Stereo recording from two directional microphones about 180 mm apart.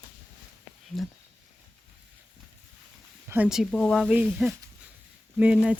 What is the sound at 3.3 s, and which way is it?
Speech, 5° right (ahead or behind).